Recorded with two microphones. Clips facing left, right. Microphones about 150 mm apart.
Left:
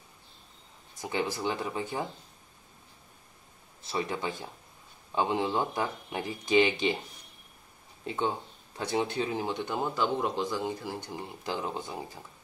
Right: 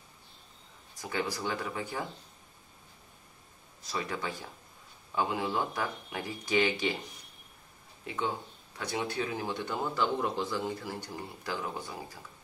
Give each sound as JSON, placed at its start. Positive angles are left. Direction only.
{"t": 1.0, "sound": "speech", "side_deg": 20}
{"t": 3.8, "sound": "speech", "side_deg": 25}
{"t": 8.1, "sound": "speech", "side_deg": 25}